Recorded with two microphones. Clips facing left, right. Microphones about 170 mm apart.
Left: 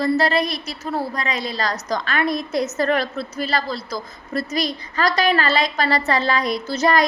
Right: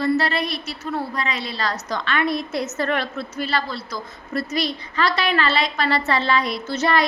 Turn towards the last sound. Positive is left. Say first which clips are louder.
# left 2 dB
turn(degrees=40)  # may be behind; listen again after turning